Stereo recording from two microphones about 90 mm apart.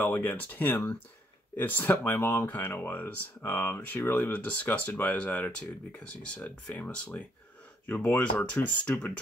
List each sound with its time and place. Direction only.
0.0 s speech: 20° left (ahead or behind)